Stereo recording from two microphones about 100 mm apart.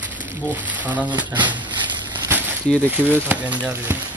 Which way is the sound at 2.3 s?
15° right (ahead or behind).